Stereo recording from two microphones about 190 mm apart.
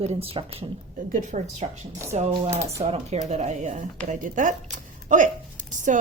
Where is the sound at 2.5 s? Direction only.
15° right (ahead or behind).